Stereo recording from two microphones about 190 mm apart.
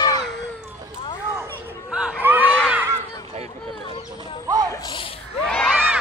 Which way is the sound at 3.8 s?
25° left (ahead or behind).